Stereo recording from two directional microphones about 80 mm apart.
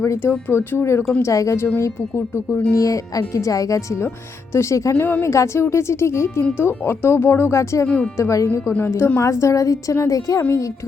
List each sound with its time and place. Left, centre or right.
0.0 s speech: left
0.3 s speech: left
1.2 s speech: left
2.7 s speech: left
7.9 s speech: centre
8.2 s speech: left